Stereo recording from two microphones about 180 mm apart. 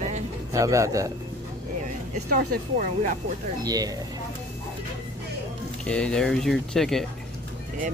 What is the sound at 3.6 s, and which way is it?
Speech, 20° right (ahead or behind).